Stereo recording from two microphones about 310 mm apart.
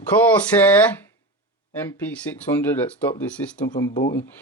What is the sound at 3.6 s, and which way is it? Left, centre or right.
Speech, left.